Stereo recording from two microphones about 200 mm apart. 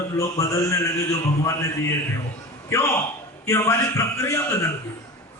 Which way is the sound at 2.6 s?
15° left (ahead or behind).